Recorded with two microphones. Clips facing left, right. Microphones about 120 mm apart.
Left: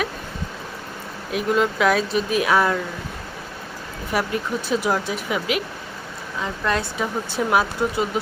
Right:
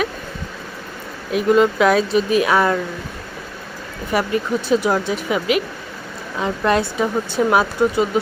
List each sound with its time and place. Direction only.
1.3 s speech: centre (ahead or behind)
4.1 s speech: centre (ahead or behind)
6.4 s speech: 15° right (ahead or behind)
7.0 s speech: centre (ahead or behind)